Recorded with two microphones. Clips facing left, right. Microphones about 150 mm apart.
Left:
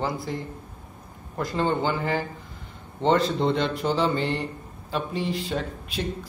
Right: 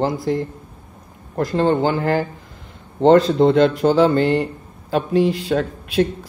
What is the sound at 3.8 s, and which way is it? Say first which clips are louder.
Mantra: right 9 dB; 50° right (ahead or behind).